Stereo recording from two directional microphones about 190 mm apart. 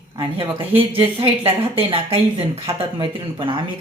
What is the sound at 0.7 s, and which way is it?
Speech, 25° right (ahead or behind).